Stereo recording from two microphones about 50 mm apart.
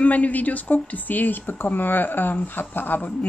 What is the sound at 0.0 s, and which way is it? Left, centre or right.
Speech, left.